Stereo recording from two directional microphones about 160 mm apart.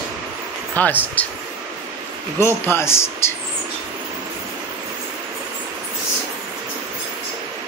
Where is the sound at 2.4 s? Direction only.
15° left (ahead or behind).